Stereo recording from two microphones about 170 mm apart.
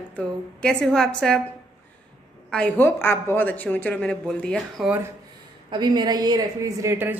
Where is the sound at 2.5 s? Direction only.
10° left (ahead or behind).